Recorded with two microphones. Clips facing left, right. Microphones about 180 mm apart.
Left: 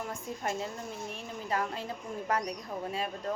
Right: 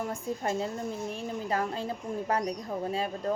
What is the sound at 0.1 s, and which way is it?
A woman's voice, 35° right (ahead or behind).